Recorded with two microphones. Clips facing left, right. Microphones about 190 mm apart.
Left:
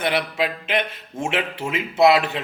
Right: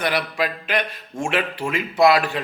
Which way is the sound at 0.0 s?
25° left (ahead or behind).